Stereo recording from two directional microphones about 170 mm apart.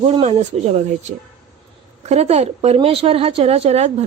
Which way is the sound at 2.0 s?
40° right (ahead or behind).